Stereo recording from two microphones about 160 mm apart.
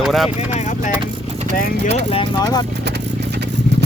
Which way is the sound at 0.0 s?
Centre (ahead or behind).